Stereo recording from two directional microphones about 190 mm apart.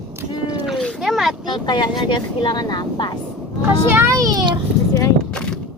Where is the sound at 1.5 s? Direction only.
25° left (ahead or behind).